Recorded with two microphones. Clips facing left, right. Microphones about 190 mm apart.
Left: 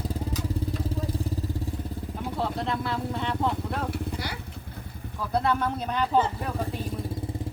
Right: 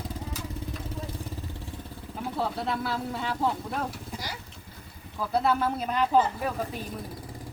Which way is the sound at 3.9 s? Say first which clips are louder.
Left 6 dB; 60° left (ahead or behind).